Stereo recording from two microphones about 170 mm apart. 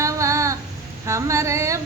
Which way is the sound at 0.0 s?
15° right (ahead or behind).